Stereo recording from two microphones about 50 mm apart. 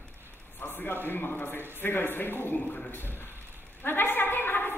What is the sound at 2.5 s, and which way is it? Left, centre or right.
Speech, left.